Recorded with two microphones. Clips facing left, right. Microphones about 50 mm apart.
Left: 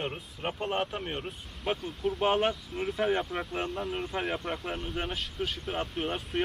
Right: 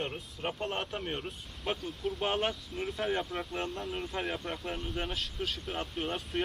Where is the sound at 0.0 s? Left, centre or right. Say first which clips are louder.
Left 2 dB; centre.